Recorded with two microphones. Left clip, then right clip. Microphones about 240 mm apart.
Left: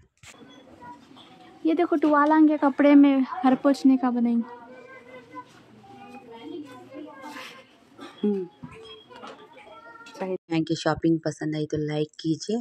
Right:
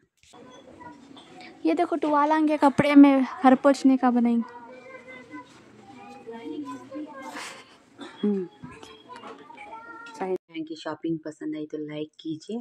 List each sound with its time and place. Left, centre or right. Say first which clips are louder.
1.6 s a woman's voice: left 1 dB; centre
1.9 s a woman's voice: left 4 dB; right
10.1 s cat: right 1 dB; right
10.5 s speech: left 9 dB; left